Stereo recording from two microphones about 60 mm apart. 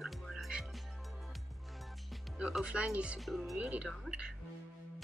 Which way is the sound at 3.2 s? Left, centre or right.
Centre.